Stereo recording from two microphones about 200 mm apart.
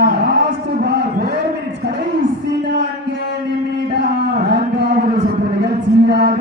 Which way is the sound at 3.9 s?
55° right (ahead or behind).